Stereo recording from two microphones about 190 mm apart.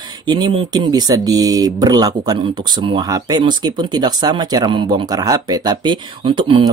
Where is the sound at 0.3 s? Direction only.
25° right (ahead or behind).